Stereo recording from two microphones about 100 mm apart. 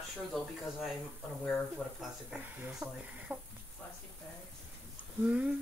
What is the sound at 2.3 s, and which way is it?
Humming, 15° right (ahead or behind).